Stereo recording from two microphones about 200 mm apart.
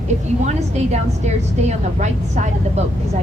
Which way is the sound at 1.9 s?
35° right (ahead or behind).